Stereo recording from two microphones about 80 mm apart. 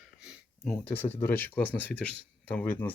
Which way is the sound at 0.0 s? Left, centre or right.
Centre.